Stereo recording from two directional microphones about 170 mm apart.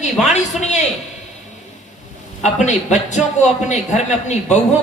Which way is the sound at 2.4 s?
45° left (ahead or behind).